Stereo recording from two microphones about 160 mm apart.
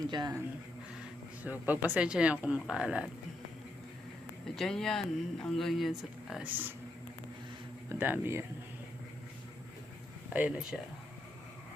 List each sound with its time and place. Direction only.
0.1 s speech: 25° right (ahead or behind)
1.5 s speech: 10° right (ahead or behind)
4.5 s speech: 5° left (ahead or behind)
7.9 s speech: 10° right (ahead or behind)
10.2 s speech: 10° right (ahead or behind)